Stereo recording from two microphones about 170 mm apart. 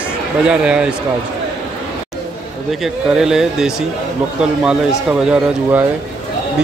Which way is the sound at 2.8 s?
Centre (ahead or behind).